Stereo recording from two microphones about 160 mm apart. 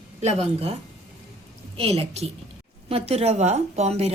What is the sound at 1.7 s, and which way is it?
Speech, 35° right (ahead or behind).